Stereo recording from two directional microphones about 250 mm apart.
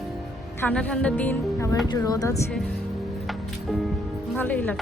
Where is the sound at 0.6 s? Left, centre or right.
Centre.